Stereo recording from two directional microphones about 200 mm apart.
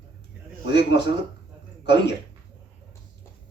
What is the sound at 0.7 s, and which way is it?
Speech, 60° left (ahead or behind).